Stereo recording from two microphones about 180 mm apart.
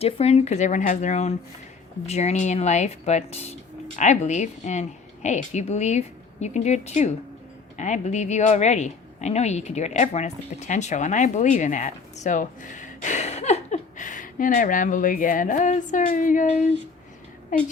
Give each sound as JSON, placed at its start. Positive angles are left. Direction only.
{"t": 0.0, "sound": "a woman's voice", "side_deg": 35}